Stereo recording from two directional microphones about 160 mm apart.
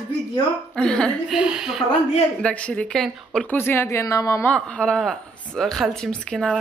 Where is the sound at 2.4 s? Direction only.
5° left (ahead or behind).